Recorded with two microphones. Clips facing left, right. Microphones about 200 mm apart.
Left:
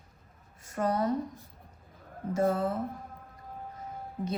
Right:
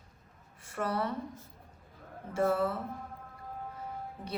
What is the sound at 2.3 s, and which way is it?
Speech, 40° left (ahead or behind).